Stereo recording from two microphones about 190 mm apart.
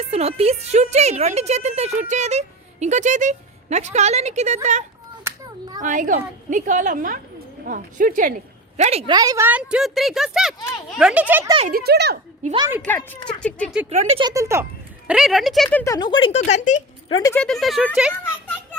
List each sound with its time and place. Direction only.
0.0 s a woman's voice: 35° right (ahead or behind)
5.2 s a sound: 20° right (ahead or behind)
5.8 s a woman's voice: 40° right (ahead or behind)
8.8 s a woman's voice: 35° right (ahead or behind)
9.1 s speech: 20° right (ahead or behind)
11.7 s speech: 60° right (ahead or behind)
12.4 s a woman's voice: 45° right (ahead or behind)
13.0 s speech: 20° left (ahead or behind)
13.4 s speech: 5° left (ahead or behind)
14.2 s speech: 20° right (ahead or behind); by 15.8 s centre (ahead or behind)
15.8 s speech: 20° left (ahead or behind)
16.4 s speech: 40° left (ahead or behind)
17.1 s speech: 20° left (ahead or behind)
17.3 s speech: 5° left (ahead or behind)